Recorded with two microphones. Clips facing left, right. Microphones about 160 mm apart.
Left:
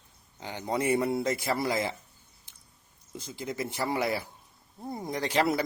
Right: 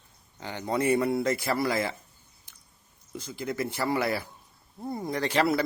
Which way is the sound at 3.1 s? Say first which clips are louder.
Right 3 dB; 20° left (ahead or behind).